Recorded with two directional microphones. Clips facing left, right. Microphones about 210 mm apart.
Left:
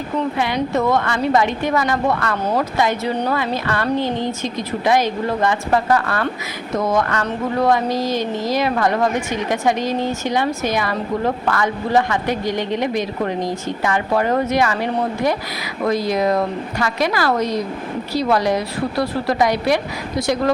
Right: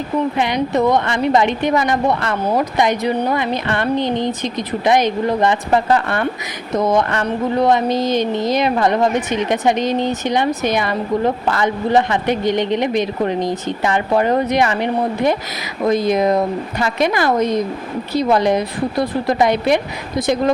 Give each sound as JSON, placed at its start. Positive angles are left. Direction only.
{"t": 0.3, "sound": "a woman's voice", "side_deg": -20}